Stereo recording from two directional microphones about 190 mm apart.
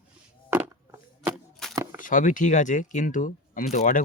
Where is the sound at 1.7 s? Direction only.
15° right (ahead or behind).